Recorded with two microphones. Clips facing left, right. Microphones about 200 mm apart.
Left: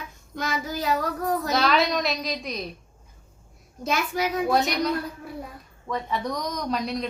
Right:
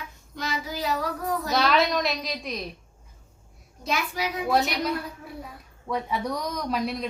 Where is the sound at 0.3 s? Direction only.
50° left (ahead or behind).